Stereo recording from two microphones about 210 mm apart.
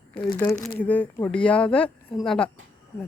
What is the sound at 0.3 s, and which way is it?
Speech, 15° left (ahead or behind).